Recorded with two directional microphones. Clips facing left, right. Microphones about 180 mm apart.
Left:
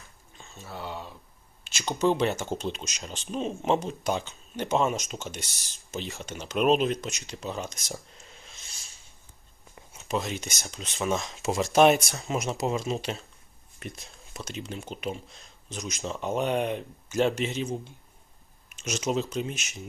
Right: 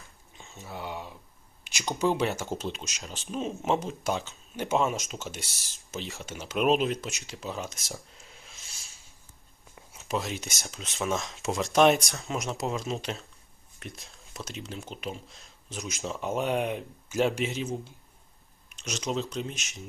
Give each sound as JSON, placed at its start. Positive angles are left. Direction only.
{"t": 0.3, "sound": "speech", "side_deg": -15}
{"t": 2.0, "sound": "speech", "side_deg": -5}